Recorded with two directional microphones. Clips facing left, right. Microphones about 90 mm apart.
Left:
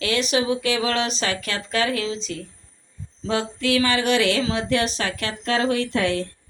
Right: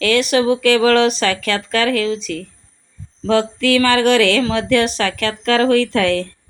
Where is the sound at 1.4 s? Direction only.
85° right.